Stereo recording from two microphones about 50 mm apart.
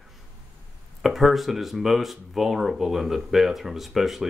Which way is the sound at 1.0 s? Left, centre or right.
Centre.